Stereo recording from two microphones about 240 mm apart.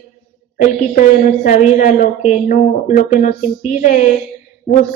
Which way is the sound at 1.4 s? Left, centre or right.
Left.